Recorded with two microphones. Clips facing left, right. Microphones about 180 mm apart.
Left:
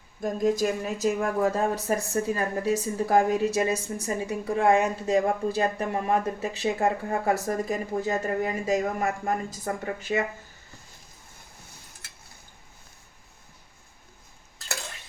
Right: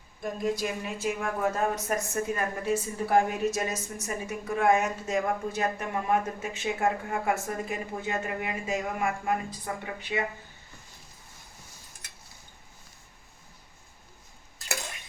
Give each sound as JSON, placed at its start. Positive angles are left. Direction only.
{"t": 0.2, "sound": "speech", "side_deg": 45}